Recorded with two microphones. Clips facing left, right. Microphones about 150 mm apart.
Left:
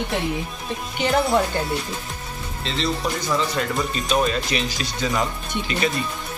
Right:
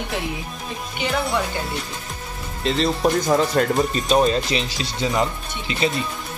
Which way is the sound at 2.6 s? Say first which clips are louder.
Right 6 dB; 45° right (ahead or behind).